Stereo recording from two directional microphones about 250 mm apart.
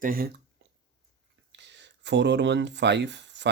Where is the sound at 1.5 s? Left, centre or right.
Right.